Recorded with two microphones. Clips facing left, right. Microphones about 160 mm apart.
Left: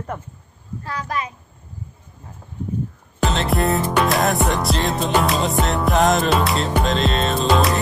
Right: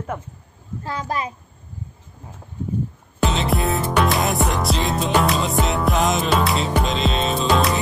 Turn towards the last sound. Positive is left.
turn(degrees=0)  # may be behind; listen again after turning